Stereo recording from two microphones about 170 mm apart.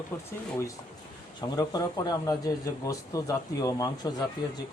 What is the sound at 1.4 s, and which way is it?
Speech, 20° left (ahead or behind).